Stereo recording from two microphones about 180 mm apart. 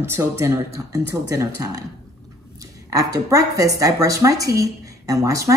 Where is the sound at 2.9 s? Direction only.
20° right (ahead or behind).